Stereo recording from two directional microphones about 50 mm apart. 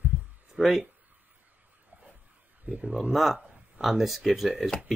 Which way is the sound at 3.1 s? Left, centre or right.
Centre.